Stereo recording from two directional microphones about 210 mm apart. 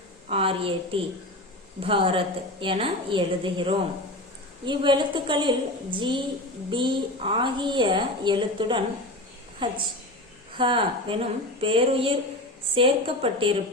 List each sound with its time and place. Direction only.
0.3 s a woman's voice: 25° right (ahead or behind)